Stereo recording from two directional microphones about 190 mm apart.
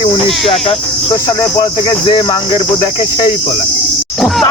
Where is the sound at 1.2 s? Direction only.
20° left (ahead or behind).